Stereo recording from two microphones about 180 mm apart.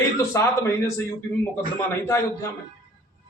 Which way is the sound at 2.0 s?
15° left (ahead or behind).